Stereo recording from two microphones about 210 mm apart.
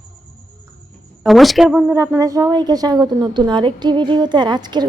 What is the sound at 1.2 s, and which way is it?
A woman's voice, centre (ahead or behind).